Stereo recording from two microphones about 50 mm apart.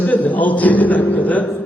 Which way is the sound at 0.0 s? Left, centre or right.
Left.